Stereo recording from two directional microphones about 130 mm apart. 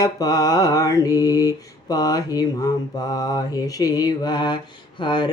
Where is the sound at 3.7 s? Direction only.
30° left (ahead or behind).